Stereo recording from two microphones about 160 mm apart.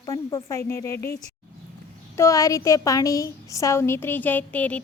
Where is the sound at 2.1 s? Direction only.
20° left (ahead or behind).